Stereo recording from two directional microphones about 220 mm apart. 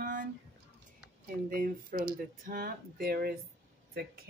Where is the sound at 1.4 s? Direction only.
40° right (ahead or behind).